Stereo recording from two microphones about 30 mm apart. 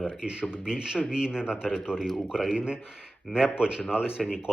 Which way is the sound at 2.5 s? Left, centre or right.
Right.